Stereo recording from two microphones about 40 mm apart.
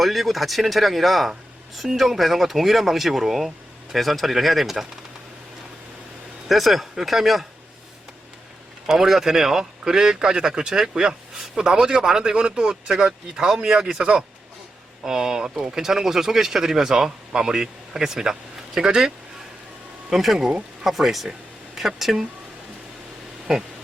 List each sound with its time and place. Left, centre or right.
0.0 s speech: centre
6.5 s speech: centre
8.9 s speech: centre